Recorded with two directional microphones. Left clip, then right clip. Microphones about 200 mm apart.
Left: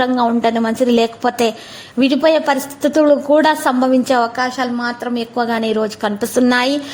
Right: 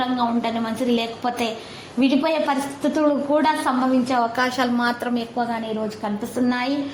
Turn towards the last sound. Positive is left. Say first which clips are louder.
# left 9 dB
turn(degrees=60)  # may be behind; listen again after turning